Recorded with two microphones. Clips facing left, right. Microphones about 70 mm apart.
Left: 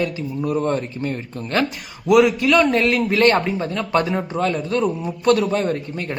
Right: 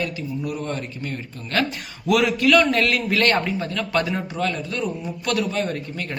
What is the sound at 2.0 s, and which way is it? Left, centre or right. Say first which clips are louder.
A man's voice: left 4 dB; left.